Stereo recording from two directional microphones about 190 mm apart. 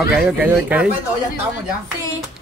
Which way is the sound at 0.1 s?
5° right (ahead or behind).